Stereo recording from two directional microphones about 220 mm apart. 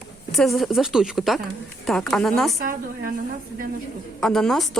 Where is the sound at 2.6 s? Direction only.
40° right (ahead or behind).